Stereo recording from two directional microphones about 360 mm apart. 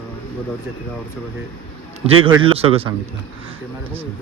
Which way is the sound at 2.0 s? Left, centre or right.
Centre.